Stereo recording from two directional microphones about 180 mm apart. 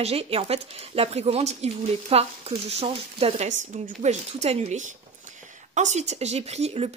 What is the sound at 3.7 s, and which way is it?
Speech, 45° right (ahead or behind).